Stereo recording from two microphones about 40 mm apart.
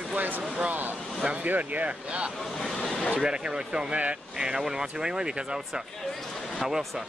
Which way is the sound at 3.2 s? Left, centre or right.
Centre.